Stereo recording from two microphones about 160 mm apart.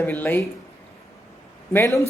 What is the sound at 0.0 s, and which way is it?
Speech, 10° left (ahead or behind).